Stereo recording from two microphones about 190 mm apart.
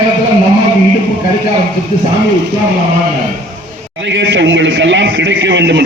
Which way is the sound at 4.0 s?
70° right (ahead or behind).